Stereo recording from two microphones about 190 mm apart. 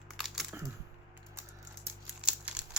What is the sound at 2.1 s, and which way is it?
Crumpling, 5° right (ahead or behind).